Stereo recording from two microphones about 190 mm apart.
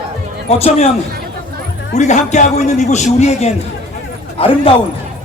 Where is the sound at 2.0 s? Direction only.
40° left (ahead or behind).